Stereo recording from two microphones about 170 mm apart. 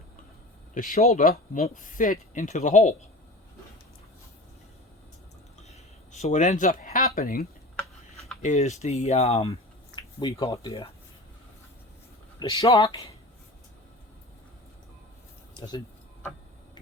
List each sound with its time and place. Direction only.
0.7 s speech: 45° left (ahead or behind)
5.6 s a sound: 40° left (ahead or behind); by 7.4 s 55° left (ahead or behind)
8.4 s speech: 45° left (ahead or behind); by 10.8 s 30° left (ahead or behind)
12.4 s speech: 20° left (ahead or behind)
12.7 s speech: 35° left (ahead or behind)
15.5 s speech: 25° left (ahead or behind)